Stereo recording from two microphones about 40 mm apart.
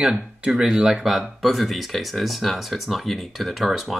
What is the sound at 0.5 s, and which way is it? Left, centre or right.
Speech, centre.